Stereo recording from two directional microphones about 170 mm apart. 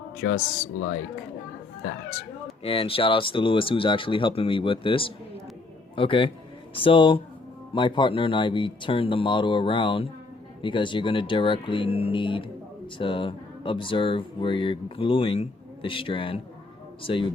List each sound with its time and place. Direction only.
0.2 s speech: 65° left (ahead or behind)
2.6 s speech: 35° left (ahead or behind)